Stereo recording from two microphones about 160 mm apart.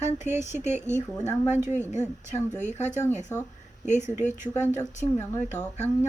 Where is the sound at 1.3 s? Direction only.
45° left (ahead or behind).